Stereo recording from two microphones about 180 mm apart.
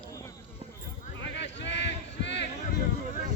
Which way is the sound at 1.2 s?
75° left (ahead or behind).